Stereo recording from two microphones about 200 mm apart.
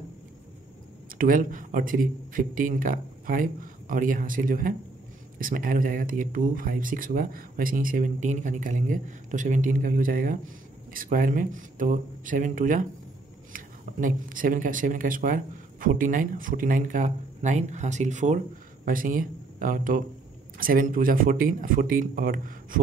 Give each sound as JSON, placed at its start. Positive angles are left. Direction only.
{"t": 1.0, "sound": "speech", "side_deg": -45}